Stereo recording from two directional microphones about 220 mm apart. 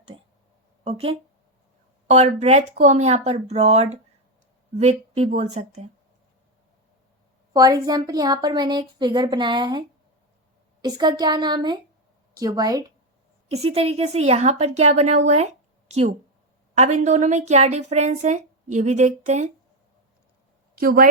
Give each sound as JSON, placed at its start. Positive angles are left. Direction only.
{"t": 0.9, "sound": "a woman's voice", "side_deg": -25}
{"t": 7.5, "sound": "a woman's voice", "side_deg": -15}
{"t": 10.8, "sound": "a woman's voice", "side_deg": -20}
{"t": 13.5, "sound": "a woman's voice", "side_deg": -30}
{"t": 20.7, "sound": "a woman's voice", "side_deg": -40}